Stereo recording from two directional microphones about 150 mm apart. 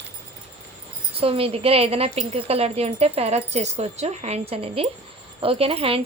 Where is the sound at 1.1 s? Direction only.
40° right (ahead or behind).